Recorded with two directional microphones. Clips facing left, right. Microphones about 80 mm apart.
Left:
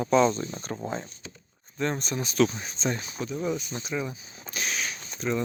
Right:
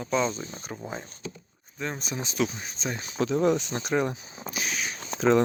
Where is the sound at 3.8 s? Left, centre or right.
Right.